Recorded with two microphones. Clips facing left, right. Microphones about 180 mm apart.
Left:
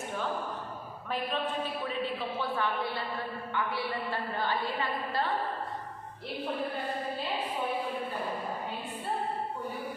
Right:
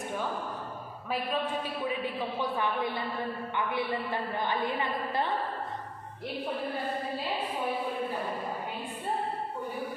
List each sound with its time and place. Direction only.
1.1 s a man's voice: 10° right (ahead or behind)